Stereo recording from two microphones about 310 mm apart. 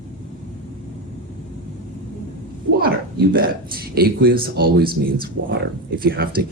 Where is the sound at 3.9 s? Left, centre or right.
Right.